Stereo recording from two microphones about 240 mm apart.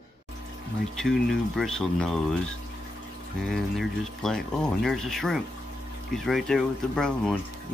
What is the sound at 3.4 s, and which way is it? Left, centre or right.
Speech, centre.